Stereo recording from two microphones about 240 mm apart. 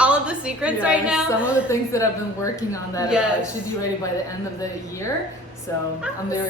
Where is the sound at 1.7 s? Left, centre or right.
Centre.